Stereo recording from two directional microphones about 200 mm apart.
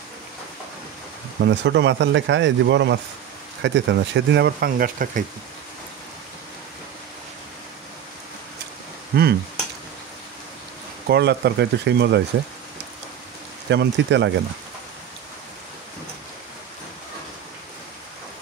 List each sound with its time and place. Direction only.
1.4 s speech: 60° right (ahead or behind); by 5.2 s 45° right (ahead or behind)
9.1 s a sound: 50° right (ahead or behind)
11.1 s speech: 55° right (ahead or behind)
13.7 s speech: 60° right (ahead or behind)